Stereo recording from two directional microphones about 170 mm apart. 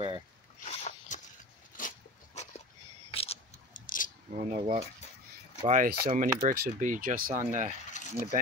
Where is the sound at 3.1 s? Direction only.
35° left (ahead or behind).